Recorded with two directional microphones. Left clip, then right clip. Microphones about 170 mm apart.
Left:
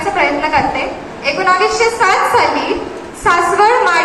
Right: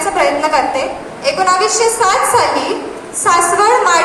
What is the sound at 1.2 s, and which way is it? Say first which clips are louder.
A woman's voice: even; 40° right (ahead or behind).